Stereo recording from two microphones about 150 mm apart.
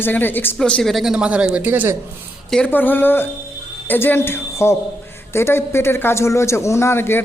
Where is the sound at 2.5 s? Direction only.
10° left (ahead or behind).